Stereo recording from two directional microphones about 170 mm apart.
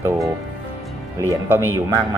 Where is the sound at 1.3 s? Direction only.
15° right (ahead or behind).